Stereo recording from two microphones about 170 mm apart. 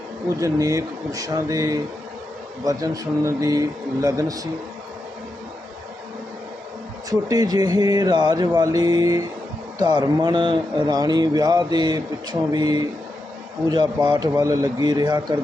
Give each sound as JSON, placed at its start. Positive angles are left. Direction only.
{"t": 0.3, "sound": "speech", "side_deg": -20}
{"t": 7.1, "sound": "speech", "side_deg": -20}